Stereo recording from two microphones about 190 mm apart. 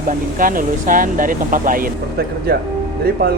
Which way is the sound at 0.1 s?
45° right (ahead or behind).